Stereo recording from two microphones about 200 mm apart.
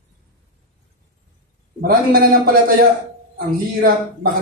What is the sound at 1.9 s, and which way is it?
Speech, 45° right (ahead or behind).